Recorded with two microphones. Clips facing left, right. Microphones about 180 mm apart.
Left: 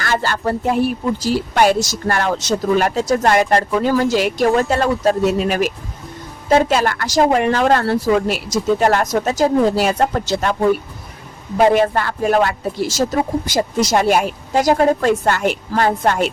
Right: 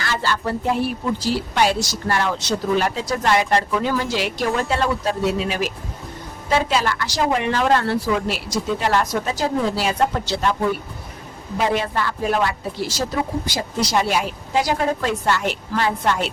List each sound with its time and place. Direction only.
0.0 s speech: 50° left (ahead or behind)
11.5 s speech: 50° left (ahead or behind)